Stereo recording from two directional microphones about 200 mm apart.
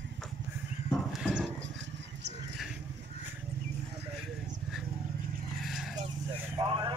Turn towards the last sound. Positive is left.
turn(degrees=-25)  # may be behind; listen again after turning